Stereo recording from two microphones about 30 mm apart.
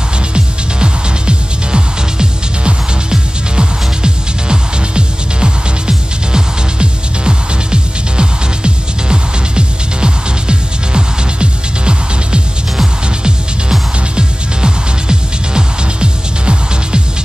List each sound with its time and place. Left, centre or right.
0.3 s music: right